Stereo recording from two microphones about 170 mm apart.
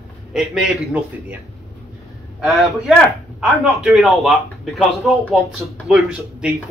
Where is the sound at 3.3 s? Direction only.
5° right (ahead or behind).